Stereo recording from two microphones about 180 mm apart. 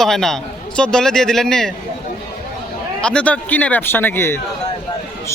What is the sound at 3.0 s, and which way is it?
A man's voice, 5° left (ahead or behind).